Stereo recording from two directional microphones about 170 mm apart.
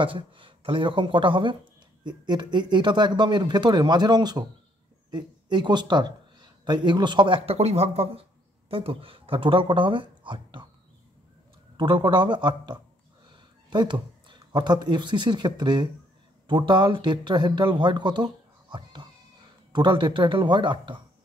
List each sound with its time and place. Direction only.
0.0 s speech: 30° right (ahead or behind)
11.7 s speech: 30° right (ahead or behind)